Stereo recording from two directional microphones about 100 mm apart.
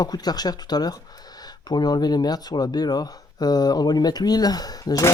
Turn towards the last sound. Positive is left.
turn(degrees=40)  # may be behind; listen again after turning